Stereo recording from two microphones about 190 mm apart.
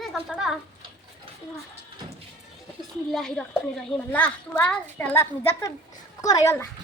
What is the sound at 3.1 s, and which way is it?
A child's voice, 5° left (ahead or behind).